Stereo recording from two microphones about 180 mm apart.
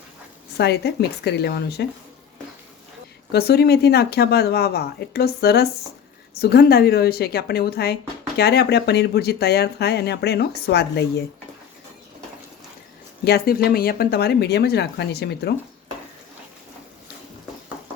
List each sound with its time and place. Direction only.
0.5 s a woman's voice: 65° left (ahead or behind)
3.3 s speech: 60° left (ahead or behind)
13.2 s speech: 60° left (ahead or behind)